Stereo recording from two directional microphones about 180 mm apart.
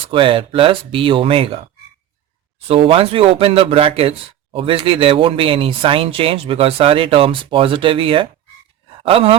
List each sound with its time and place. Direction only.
0.1 s speech: 30° right (ahead or behind)
2.6 s speech: 30° right (ahead or behind)